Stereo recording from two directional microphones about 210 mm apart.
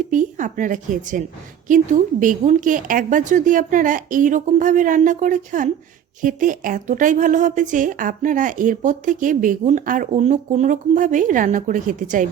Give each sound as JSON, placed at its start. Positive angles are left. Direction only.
{"t": 0.1, "sound": "speech", "side_deg": -35}